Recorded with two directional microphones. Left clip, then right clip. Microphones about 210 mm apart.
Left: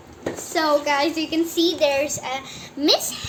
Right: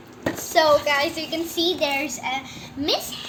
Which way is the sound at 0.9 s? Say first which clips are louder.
Left 1 dB; 35° left (ahead or behind).